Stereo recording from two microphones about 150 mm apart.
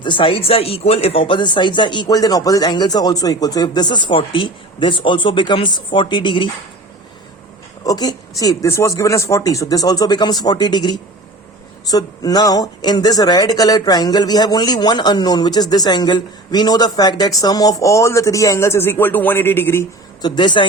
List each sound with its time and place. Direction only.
0.0 s speech: 35° left (ahead or behind)
7.9 s speech: 25° left (ahead or behind)
20.2 s speech: 30° left (ahead or behind)